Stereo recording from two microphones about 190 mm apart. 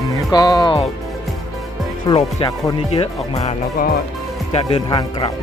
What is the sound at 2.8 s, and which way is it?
Speech, 30° left (ahead or behind).